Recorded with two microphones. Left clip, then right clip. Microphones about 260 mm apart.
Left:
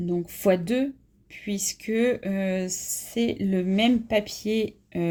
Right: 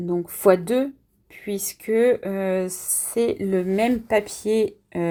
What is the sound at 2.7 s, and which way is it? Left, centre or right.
Speech, right.